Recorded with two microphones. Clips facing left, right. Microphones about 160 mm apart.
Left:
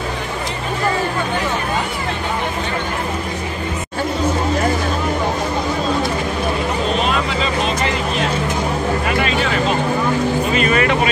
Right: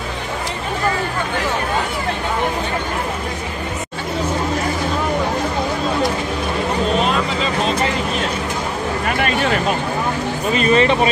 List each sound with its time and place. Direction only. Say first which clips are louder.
10.5 s vehicle: right 6 dB; 35° right (ahead or behind)